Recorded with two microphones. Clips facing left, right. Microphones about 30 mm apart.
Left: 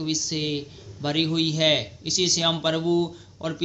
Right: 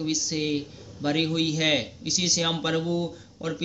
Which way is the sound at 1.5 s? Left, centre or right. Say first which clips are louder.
Left 2 dB; left.